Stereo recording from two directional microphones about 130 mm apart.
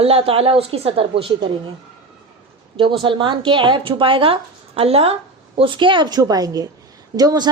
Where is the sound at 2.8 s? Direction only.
40° right (ahead or behind).